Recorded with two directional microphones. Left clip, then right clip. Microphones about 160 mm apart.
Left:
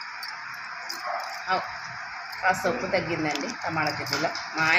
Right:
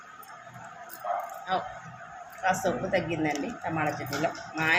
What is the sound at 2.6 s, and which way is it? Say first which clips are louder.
Speech: left 2 dB; centre (ahead or behind).